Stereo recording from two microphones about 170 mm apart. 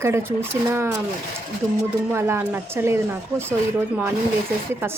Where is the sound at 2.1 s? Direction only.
15° right (ahead or behind).